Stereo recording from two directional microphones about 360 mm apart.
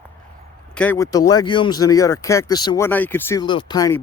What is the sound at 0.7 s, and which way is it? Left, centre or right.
Speech, centre.